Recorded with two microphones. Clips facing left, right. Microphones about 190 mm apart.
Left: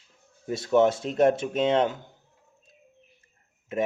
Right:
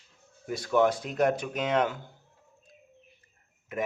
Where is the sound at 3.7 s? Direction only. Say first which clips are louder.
Left 5 dB; 25° left (ahead or behind).